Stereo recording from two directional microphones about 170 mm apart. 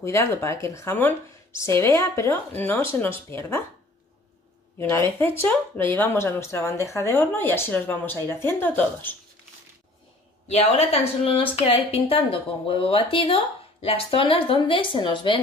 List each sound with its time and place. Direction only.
0.0 s speech: 15° left (ahead or behind)
4.7 s speech: 15° left (ahead or behind)
10.5 s a woman's voice: 40° left (ahead or behind)